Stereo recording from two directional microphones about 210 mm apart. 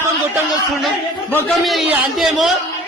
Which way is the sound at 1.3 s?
10° left (ahead or behind).